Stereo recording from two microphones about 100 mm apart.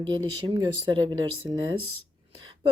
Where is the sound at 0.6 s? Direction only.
50° right (ahead or behind).